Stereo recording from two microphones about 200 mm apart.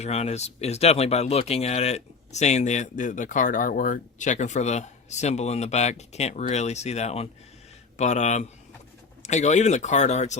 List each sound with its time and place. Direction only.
0.0 s speech: 30° left (ahead or behind)